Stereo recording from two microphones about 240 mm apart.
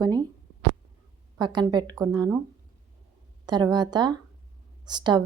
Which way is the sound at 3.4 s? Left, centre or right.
Centre.